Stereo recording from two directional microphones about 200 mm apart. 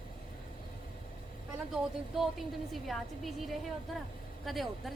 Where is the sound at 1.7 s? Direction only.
Centre (ahead or behind).